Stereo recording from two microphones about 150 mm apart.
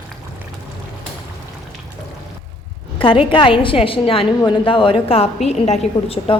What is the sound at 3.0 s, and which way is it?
A woman's voice, 35° left (ahead or behind).